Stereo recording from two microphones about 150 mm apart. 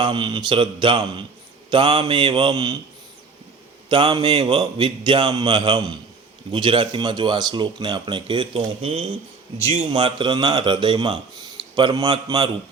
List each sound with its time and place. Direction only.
0.0 s speech: 35° right (ahead or behind)
3.8 s a man's voice: 35° right (ahead or behind)
9.9 s speech: 30° right (ahead or behind)